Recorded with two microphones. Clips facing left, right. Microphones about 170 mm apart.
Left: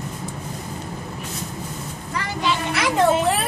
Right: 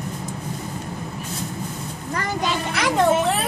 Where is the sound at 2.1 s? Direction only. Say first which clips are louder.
Even; 45° right (ahead or behind).